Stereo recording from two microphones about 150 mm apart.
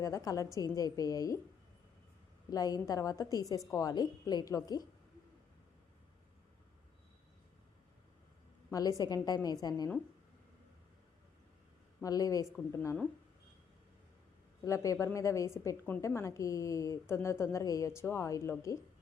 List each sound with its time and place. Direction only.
0.0 s a woman's voice: 25° left (ahead or behind)
2.5 s a woman's voice: 25° left (ahead or behind)
8.7 s a woman's voice: 25° left (ahead or behind)
12.0 s a woman's voice: 25° left (ahead or behind)
14.6 s a woman's voice: 20° left (ahead or behind)